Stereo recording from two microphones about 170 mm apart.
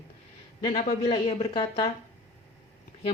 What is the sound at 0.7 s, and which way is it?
Speech, 35° left (ahead or behind).